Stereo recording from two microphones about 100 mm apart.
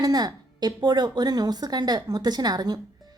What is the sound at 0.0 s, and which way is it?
A woman's voice, 40° right (ahead or behind).